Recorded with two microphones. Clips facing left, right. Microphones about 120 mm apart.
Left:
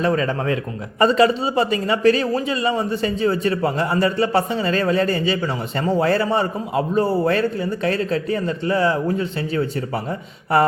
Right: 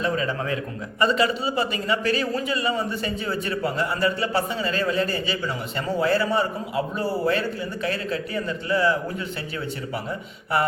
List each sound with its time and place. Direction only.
0.0 s a man's voice: 50° left (ahead or behind)
0.3 s a man's voice: 40° left (ahead or behind)